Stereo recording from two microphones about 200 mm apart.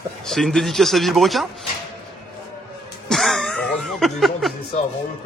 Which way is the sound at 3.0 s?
Centre (ahead or behind).